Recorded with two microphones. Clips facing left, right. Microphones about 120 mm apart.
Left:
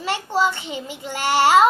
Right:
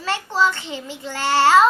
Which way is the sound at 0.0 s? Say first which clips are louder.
Even; 15° left (ahead or behind).